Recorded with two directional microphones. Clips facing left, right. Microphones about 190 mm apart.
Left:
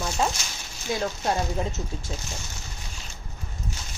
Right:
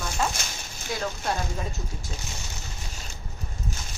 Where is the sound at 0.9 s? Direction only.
25° left (ahead or behind).